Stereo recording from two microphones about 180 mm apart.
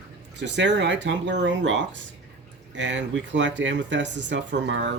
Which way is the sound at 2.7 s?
85° right.